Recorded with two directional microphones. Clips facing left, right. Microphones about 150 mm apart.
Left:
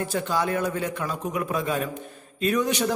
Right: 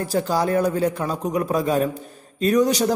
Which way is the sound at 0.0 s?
35° right (ahead or behind).